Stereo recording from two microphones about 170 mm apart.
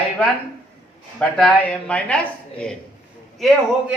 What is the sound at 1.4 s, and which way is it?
A woman's voice, 5° left (ahead or behind).